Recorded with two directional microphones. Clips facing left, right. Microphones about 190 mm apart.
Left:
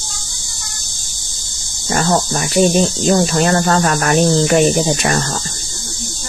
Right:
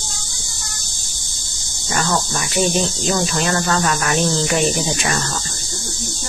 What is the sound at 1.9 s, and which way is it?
Speech, 35° left (ahead or behind).